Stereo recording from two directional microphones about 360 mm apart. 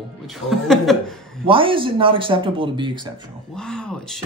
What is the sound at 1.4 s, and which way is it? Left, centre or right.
Speech, centre.